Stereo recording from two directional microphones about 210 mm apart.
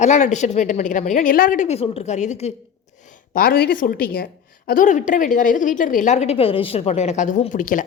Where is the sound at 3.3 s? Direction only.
45° left (ahead or behind).